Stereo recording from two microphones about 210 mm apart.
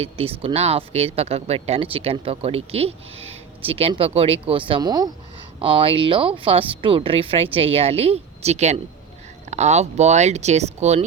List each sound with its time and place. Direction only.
0.0 s speech: 25° right (ahead or behind)